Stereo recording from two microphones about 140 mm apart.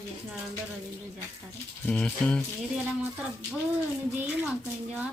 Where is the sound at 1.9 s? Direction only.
10° left (ahead or behind).